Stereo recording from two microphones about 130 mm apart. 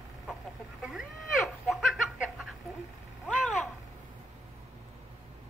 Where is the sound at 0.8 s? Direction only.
Centre (ahead or behind).